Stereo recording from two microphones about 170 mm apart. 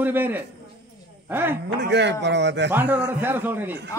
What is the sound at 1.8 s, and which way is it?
Speech, 90° right.